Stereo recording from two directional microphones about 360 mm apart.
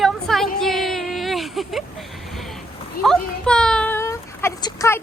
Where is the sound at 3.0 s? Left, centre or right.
Centre.